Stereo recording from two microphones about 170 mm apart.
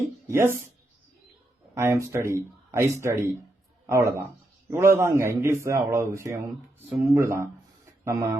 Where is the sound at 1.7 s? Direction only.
15° right (ahead or behind).